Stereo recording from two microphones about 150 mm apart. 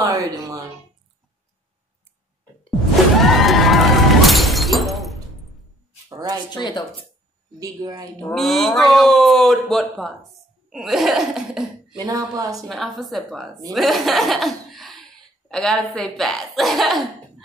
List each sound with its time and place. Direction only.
0.0 s speech: 20° right (ahead or behind)
3.2 s shatter: centre (ahead or behind)
6.0 s a sound: 25° right (ahead or behind)
6.6 s speech: 30° left (ahead or behind)
7.5 s speech: 25° right (ahead or behind)
8.2 s speech: 5° left (ahead or behind)
12.0 s speech: 25° right (ahead or behind)
12.6 s speech: centre (ahead or behind)